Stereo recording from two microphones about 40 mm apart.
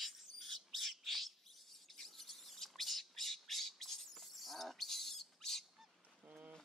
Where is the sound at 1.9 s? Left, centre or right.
Centre.